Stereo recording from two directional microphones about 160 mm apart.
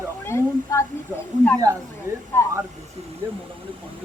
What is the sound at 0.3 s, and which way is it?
Speech, 15° left (ahead or behind).